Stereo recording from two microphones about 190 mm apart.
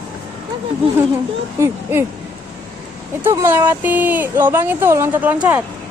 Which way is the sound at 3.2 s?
10° right (ahead or behind).